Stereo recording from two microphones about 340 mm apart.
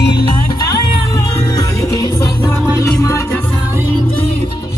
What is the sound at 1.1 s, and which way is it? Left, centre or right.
Music, centre.